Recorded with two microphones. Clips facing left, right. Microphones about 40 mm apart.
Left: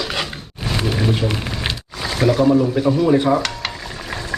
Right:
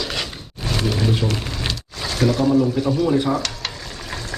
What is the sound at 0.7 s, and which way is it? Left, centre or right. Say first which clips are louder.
Pour: left 1 dB; centre.